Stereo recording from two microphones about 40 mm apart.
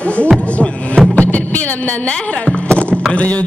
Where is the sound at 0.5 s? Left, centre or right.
Left.